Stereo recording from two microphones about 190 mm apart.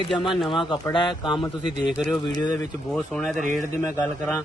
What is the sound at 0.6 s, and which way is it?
A man's voice, 25° left (ahead or behind).